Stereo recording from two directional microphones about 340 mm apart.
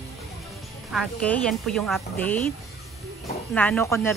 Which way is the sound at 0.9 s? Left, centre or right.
Centre.